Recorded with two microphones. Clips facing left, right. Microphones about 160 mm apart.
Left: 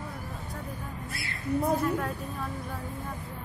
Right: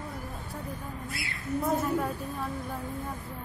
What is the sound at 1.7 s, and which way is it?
Speech, centre (ahead or behind).